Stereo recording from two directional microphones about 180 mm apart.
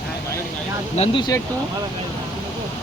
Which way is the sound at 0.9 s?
35° left (ahead or behind).